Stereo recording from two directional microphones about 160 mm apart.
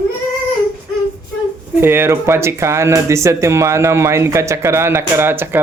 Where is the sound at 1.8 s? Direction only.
15° right (ahead or behind).